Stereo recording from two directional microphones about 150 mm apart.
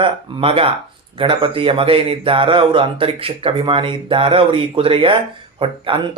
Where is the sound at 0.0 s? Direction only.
35° right (ahead or behind).